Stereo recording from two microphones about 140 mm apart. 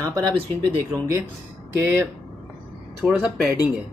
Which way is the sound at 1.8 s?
20° right (ahead or behind).